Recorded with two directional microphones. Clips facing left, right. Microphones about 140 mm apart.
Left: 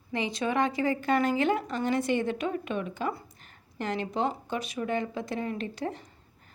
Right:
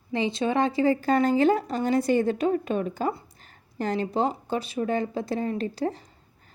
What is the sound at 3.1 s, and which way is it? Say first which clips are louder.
Speech: right 4 dB; 25° right (ahead or behind).